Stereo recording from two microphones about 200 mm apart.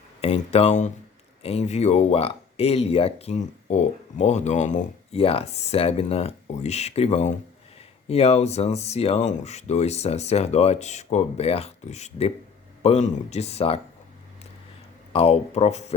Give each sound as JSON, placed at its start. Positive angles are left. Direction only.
{"t": 0.2, "sound": "speech", "side_deg": 30}
{"t": 15.1, "sound": "speech", "side_deg": 30}